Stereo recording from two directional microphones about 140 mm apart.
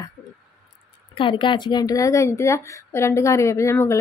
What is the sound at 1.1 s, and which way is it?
A woman's voice, 35° left (ahead or behind).